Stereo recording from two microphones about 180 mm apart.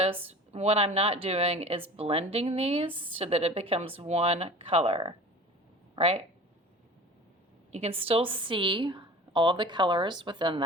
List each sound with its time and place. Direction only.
0.0 s speech: 35° right (ahead or behind)
7.7 s a woman's voice: 35° right (ahead or behind)